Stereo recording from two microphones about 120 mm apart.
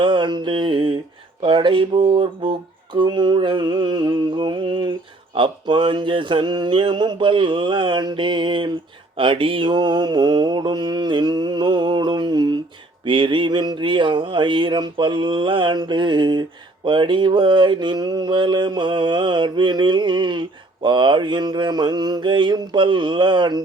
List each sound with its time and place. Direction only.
0.0 s mantra: 40° right (ahead or behind)
1.4 s a sound: 45° right (ahead or behind)
9.1 s mantra: 45° right (ahead or behind)